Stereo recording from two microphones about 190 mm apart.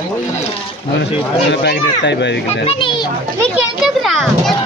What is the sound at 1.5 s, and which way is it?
Speech, 65° left (ahead or behind).